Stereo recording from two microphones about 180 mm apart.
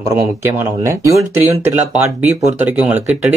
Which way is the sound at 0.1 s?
15° right (ahead or behind).